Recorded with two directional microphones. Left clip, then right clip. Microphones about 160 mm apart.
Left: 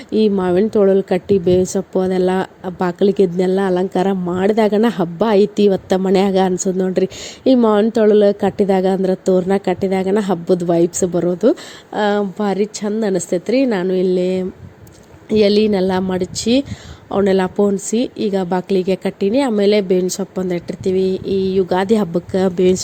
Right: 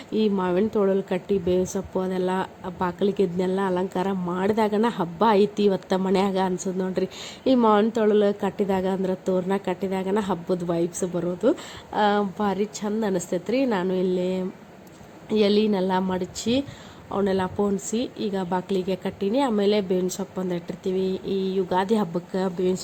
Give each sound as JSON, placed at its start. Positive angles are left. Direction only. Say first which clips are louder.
{"t": 0.1, "sound": "a woman's voice", "louder": "left 8 dB", "side_deg": 30}